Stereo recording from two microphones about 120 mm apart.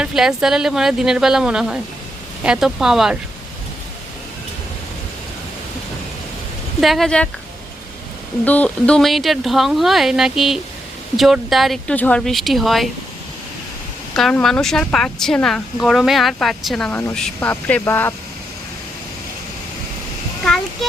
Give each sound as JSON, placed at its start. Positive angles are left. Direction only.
{"t": 0.0, "sound": "speech", "side_deg": -5}
{"t": 6.8, "sound": "speech", "side_deg": 0}
{"t": 8.4, "sound": "speech", "side_deg": 10}
{"t": 11.9, "sound": "speech", "side_deg": 15}
{"t": 12.2, "sound": "speech", "side_deg": 0}
{"t": 14.4, "sound": "speech", "side_deg": 5}
{"t": 17.5, "sound": "speech", "side_deg": 15}